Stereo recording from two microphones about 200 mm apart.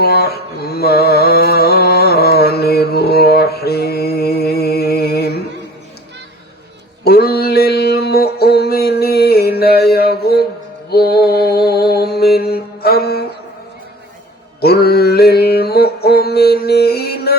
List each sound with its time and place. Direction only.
0.0 s mantra: 55° left (ahead or behind)
7.0 s mantra: 50° left (ahead or behind)
9.9 s a sound: 50° left (ahead or behind)
10.8 s mantra: 50° left (ahead or behind)
14.6 s mantra: 50° left (ahead or behind)